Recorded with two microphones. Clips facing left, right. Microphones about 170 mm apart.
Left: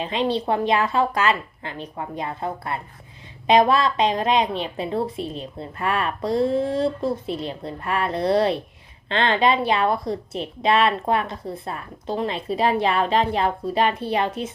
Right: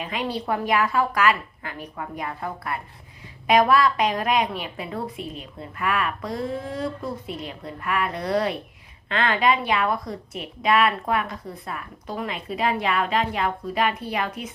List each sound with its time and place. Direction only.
0.0 s a woman's voice: 25° left (ahead or behind)